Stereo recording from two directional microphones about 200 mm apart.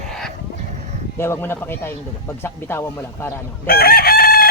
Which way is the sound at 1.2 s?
10° left (ahead or behind).